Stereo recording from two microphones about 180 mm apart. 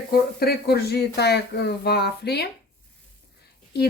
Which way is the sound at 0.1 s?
60° left (ahead or behind).